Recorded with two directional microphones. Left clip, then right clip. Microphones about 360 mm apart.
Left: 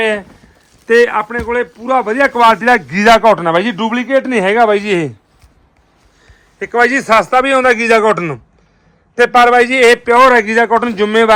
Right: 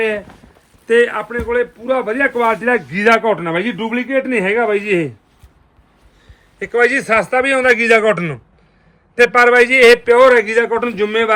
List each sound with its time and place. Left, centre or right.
0.9 s a man's voice: centre
6.6 s a man's voice: left